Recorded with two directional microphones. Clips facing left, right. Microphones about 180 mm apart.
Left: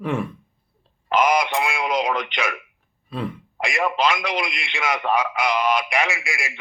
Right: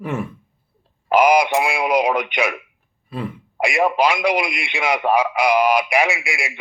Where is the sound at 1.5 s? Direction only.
15° right (ahead or behind).